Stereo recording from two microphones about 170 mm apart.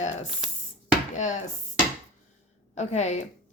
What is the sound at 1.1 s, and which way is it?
Speech, 45° left (ahead or behind).